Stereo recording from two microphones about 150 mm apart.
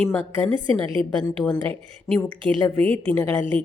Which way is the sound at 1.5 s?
5° left (ahead or behind).